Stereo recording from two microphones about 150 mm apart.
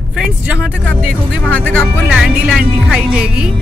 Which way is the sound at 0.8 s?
10° left (ahead or behind).